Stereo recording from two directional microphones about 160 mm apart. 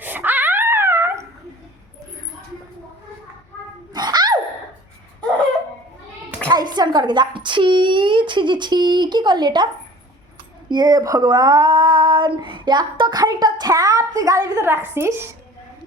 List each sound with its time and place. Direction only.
0.0 s dog: 10° right (ahead or behind)
3.9 s sneeze: 25° right (ahead or behind)
6.5 s a woman's voice: 25° right (ahead or behind)
10.7 s speech: 25° right (ahead or behind)